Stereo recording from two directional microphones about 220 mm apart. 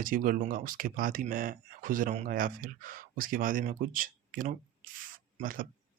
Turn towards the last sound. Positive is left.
turn(degrees=-40)  # may be behind; listen again after turning